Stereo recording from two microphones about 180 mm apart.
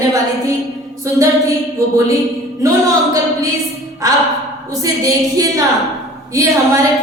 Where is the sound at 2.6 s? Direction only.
15° right (ahead or behind).